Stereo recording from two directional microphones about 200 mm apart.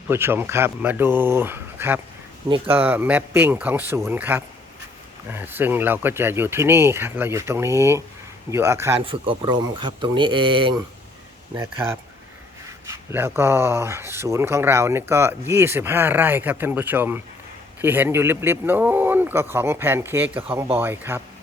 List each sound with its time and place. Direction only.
0.1 s speech: 10° right (ahead or behind)
9.0 s speech: 25° right (ahead or behind)
13.1 s speech: 10° right (ahead or behind)